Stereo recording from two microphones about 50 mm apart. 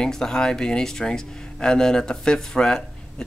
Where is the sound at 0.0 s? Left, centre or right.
Centre.